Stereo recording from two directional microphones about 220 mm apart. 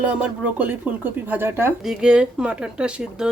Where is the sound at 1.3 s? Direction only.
10° right (ahead or behind).